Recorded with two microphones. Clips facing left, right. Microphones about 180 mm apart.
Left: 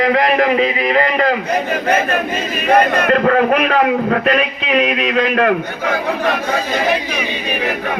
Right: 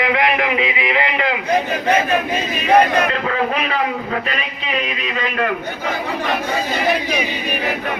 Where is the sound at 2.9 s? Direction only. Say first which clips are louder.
Left 6 dB; 50° left (ahead or behind).